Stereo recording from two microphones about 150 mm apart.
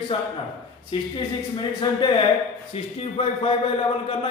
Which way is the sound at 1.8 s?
30° left (ahead or behind).